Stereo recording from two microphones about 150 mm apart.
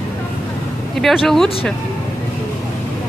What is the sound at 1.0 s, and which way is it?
Speech, centre (ahead or behind).